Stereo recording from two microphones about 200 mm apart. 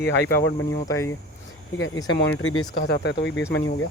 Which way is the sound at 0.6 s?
15° left (ahead or behind).